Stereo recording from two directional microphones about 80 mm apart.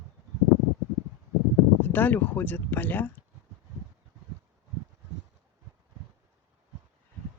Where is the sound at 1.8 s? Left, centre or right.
Left.